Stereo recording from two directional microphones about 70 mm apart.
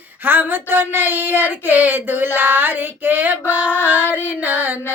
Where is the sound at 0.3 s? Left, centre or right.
Right.